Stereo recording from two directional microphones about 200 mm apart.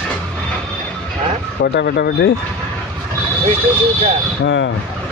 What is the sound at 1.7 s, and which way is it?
Speech, 55° left (ahead or behind).